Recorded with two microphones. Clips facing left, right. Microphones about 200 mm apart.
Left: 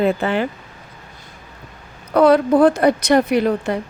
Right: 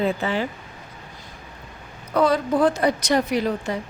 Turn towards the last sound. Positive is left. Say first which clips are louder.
# left 6 dB
turn(degrees=60)  # may be behind; listen again after turning